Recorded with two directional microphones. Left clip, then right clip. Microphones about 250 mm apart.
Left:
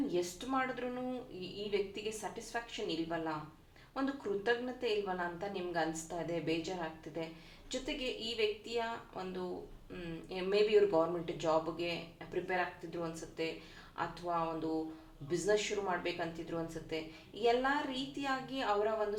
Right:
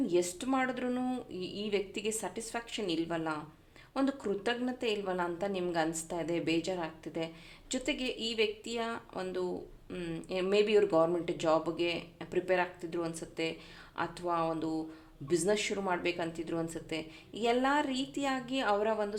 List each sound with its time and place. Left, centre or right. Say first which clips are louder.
0.1 s speech: right 5 dB; right